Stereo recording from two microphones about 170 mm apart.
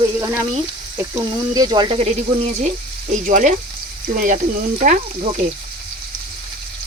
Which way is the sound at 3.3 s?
50° right (ahead or behind).